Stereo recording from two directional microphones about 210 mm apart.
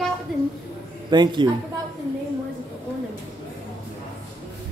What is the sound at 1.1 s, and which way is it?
Speech, 20° right (ahead or behind).